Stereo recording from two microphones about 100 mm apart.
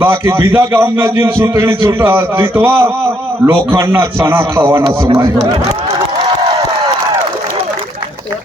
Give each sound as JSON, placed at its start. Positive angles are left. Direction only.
{"t": 0.0, "sound": "a man's voice", "side_deg": -25}